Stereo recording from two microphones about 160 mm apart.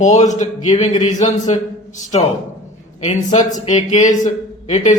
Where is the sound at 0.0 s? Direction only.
50° left (ahead or behind).